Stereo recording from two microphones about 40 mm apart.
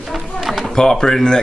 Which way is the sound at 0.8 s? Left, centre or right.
Centre.